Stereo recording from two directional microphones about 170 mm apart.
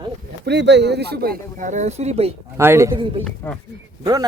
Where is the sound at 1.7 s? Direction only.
40° right (ahead or behind).